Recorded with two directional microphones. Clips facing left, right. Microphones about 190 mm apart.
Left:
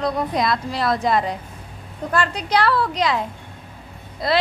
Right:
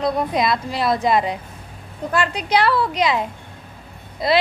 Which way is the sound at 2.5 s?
25° right (ahead or behind).